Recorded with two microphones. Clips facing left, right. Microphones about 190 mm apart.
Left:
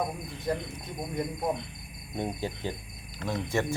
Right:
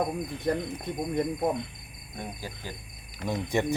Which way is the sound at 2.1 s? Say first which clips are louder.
Left 6 dB; 25° left (ahead or behind).